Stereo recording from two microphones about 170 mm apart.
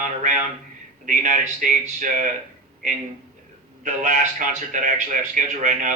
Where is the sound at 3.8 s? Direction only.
50° right (ahead or behind).